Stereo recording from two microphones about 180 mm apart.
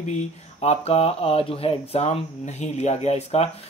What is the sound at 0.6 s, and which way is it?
Speech, 35° left (ahead or behind).